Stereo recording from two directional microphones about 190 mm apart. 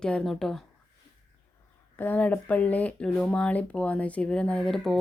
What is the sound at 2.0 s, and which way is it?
Speech, 10° left (ahead or behind).